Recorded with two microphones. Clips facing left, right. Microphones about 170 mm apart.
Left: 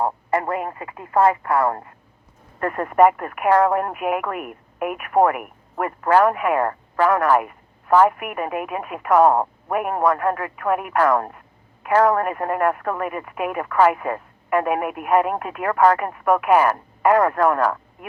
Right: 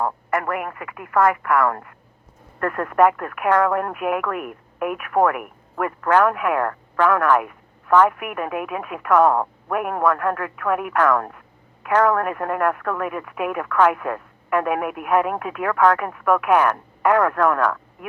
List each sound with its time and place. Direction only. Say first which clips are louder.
0.0 s speech: left 1 dB; 25° left (ahead or behind)
2.6 s speech: left 1 dB; 10° left (ahead or behind)
9.2 s speech: left 2 dB; 15° left (ahead or behind)
9.7 s speech: left 1 dB; 5° left (ahead or behind)